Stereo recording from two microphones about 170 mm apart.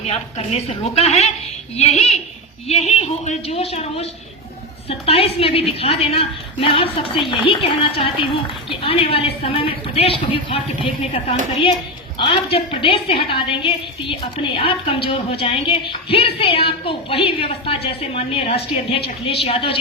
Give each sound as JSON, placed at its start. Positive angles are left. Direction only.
{"t": 0.1, "sound": "a woman's voice", "side_deg": 40}
{"t": 12.1, "sound": "a woman's voice", "side_deg": 30}